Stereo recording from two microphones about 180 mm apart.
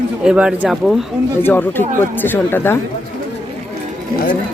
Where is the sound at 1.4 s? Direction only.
10° left (ahead or behind).